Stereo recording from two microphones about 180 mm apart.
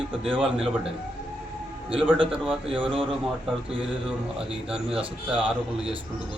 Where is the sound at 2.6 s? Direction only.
30° right (ahead or behind).